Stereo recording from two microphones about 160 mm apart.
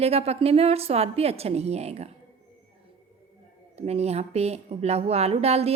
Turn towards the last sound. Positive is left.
turn(degrees=-40)  # may be behind; listen again after turning